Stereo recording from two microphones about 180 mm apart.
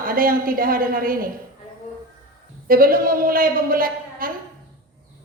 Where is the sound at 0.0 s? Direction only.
55° right (ahead or behind).